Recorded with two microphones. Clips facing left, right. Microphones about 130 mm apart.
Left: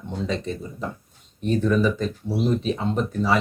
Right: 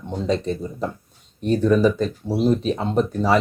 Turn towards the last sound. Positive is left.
turn(degrees=-40)  # may be behind; listen again after turning